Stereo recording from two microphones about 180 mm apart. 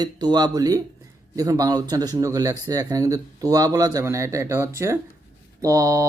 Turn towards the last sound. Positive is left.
turn(degrees=-20)  # may be behind; listen again after turning